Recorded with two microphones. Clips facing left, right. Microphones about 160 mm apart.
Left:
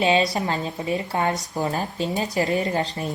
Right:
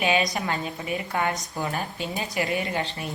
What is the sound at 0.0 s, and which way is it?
A woman's voice, 30° left (ahead or behind).